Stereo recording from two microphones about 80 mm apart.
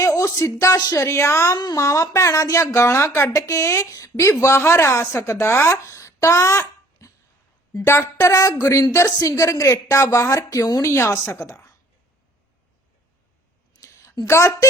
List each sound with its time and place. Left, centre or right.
0.0 s a sound: left
0.9 s speech: left
1.5 s speech: left
1.8 s a woman's voice: left
10.9 s speech: left
13.8 s a sound: left